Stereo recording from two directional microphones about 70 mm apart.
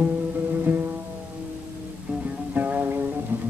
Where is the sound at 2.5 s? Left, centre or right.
Right.